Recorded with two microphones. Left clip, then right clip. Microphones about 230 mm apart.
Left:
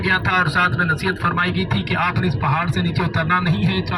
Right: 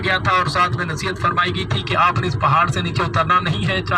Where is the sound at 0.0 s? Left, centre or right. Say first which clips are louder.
Even; right.